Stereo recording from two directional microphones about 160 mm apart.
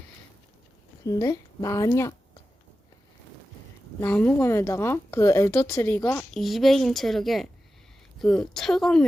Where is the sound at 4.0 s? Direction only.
10° left (ahead or behind).